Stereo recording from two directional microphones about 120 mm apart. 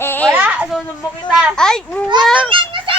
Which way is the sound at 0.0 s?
20° left (ahead or behind).